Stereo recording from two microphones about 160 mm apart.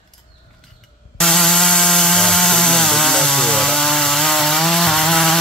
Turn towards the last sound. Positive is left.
turn(degrees=0)  # may be behind; listen again after turning